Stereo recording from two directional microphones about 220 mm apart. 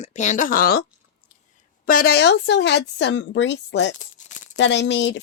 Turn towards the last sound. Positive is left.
turn(degrees=55)  # may be behind; listen again after turning